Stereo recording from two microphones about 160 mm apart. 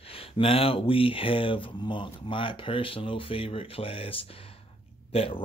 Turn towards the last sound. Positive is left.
turn(degrees=35)  # may be behind; listen again after turning